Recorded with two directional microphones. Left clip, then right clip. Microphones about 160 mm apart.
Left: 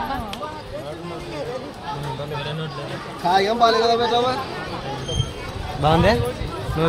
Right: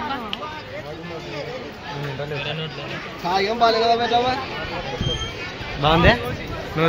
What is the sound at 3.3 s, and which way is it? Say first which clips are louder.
Speech: left 3 dB; 15° left (ahead or behind).